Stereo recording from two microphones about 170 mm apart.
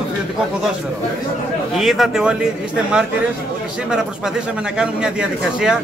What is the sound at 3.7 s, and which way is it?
Speech, 5° right (ahead or behind).